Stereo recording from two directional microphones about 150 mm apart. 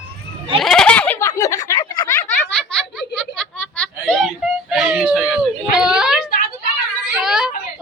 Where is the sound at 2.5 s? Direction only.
5° left (ahead or behind).